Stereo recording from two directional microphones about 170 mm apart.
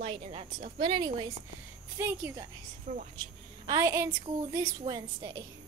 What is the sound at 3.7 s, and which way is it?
A woman's voice, 20° right (ahead or behind).